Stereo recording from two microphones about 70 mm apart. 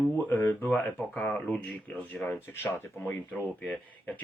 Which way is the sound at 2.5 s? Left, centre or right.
Left.